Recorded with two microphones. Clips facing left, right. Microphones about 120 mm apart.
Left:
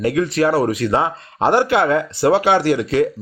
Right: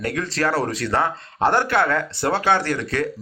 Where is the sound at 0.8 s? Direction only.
15° left (ahead or behind).